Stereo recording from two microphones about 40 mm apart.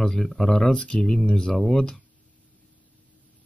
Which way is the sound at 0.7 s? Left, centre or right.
Left.